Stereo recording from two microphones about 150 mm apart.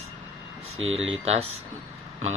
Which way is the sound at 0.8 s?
40° right (ahead or behind).